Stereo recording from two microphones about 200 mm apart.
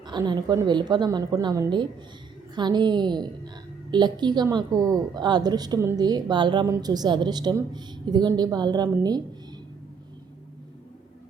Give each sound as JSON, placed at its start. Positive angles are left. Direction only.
{"t": 0.0, "sound": "a woman's voice", "side_deg": -20}